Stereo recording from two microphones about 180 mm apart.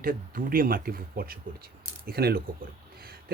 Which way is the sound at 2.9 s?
55° right (ahead or behind).